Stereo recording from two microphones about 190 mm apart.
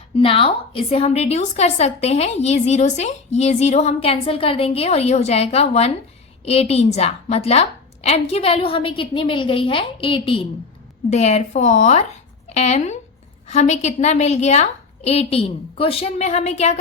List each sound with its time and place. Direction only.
0.2 s a woman's voice: 30° left (ahead or behind)